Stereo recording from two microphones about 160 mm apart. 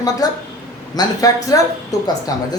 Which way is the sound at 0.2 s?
25° left (ahead or behind).